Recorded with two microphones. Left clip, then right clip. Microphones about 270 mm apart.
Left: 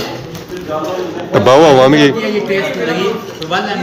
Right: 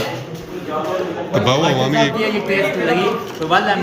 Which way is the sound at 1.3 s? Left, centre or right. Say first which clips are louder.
Left 10 dB; centre.